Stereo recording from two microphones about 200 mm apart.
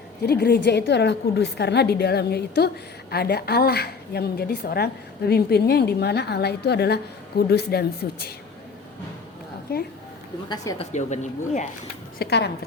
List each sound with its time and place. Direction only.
0.2 s a woman's voice: 50° left (ahead or behind)
9.7 s a woman's voice: 50° left (ahead or behind)
10.5 s a woman's voice: 15° left (ahead or behind)
10.8 s speech: 35° left (ahead or behind)
12.2 s a woman's voice: 55° left (ahead or behind)